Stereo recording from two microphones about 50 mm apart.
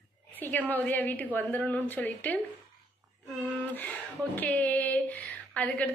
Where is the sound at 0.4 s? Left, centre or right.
Left.